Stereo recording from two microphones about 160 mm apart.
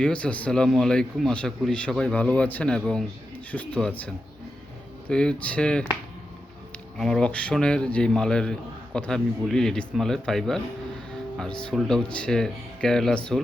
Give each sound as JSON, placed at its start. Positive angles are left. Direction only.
{"t": 0.0, "sound": "a man's voice", "side_deg": 5}
{"t": 7.0, "sound": "a man's voice", "side_deg": 5}
{"t": 11.6, "sound": "a man's voice", "side_deg": 5}